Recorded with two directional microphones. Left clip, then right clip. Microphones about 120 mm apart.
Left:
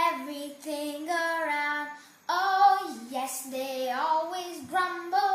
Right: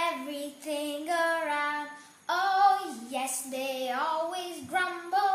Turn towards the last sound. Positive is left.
turn(degrees=0)  # may be behind; listen again after turning